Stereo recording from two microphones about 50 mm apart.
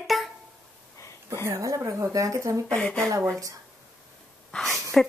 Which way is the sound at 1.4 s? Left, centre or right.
Right.